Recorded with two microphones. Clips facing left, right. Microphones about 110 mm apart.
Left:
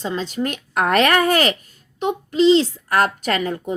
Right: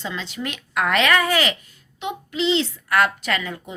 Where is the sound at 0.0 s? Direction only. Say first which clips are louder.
Left 6 dB; 40° left (ahead or behind).